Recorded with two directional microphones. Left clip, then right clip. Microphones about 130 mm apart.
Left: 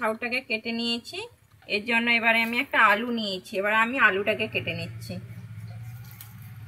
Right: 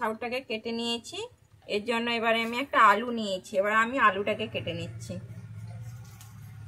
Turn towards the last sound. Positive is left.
turn(degrees=-35)  # may be behind; listen again after turning